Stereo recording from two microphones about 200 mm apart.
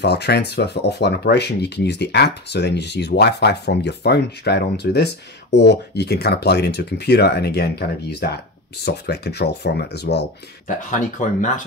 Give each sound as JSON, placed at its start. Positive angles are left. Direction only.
{"t": 0.0, "sound": "speech", "side_deg": 55}
{"t": 10.7, "sound": "speech", "side_deg": 40}